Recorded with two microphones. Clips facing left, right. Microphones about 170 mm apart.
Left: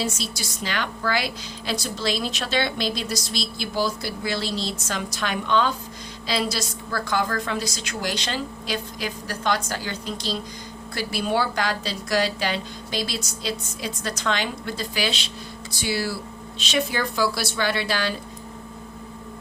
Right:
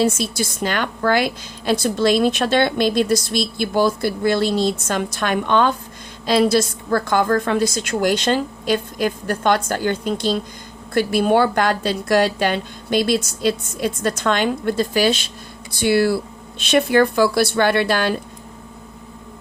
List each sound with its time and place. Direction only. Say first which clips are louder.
0.0 s a woman's voice: right 9 dB; 55° right (ahead or behind)